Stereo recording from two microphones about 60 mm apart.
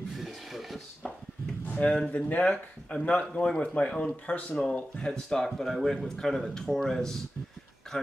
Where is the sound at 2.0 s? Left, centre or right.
Left.